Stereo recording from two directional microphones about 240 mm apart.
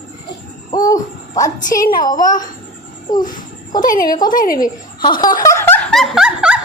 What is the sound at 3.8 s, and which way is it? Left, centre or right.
Speech, left.